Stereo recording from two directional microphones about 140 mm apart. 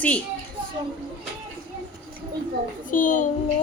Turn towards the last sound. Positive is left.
turn(degrees=70)  # may be behind; listen again after turning